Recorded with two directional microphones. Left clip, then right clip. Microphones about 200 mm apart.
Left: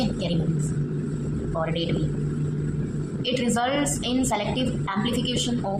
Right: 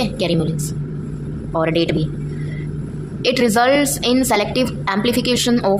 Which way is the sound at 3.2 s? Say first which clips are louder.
Right 10 dB; 55° right (ahead or behind).